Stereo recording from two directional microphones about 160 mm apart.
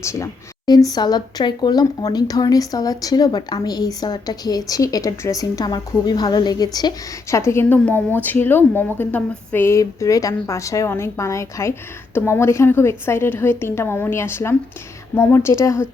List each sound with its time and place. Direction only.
0.0 s a woman's voice: 20° left (ahead or behind)